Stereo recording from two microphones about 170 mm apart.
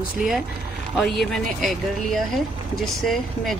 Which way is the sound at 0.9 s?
Centre (ahead or behind).